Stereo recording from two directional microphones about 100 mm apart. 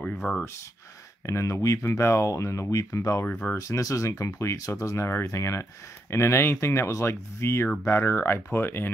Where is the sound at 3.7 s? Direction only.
35° left (ahead or behind).